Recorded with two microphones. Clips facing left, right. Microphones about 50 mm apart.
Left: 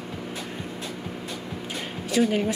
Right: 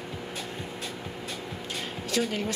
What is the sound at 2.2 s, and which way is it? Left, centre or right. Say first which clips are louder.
Speech: left 6 dB; centre.